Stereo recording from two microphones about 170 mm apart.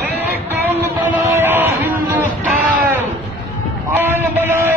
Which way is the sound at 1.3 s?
10° right (ahead or behind).